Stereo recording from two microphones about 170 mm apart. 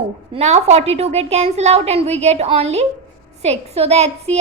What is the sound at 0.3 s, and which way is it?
A woman's voice, 40° right (ahead or behind).